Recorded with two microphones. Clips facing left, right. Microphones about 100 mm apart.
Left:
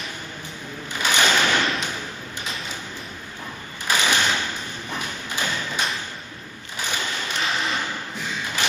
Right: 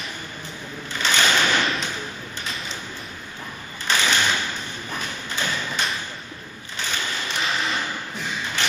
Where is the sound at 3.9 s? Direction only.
10° left (ahead or behind).